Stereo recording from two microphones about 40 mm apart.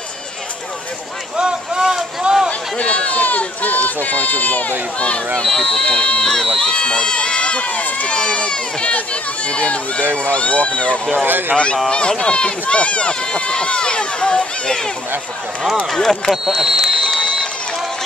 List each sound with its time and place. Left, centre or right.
1.3 s speech: right
1.8 s boat: centre
2.3 s a sound: right
2.8 s run: left
5.4 s speech: centre
6.6 s run: left
8.1 s speech: left
11.2 s speech: right
11.5 s speech: left
15.9 s speech: centre
16.4 s speech: centre